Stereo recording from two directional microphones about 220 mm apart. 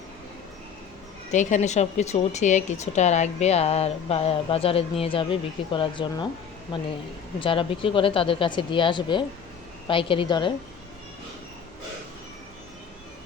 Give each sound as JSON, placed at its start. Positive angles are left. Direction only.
{"t": 1.3, "sound": "a woman's voice", "side_deg": 35}
{"t": 7.3, "sound": "a woman's voice", "side_deg": 25}